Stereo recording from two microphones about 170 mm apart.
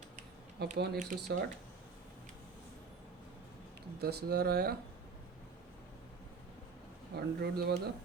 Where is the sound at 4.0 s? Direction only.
70° right (ahead or behind).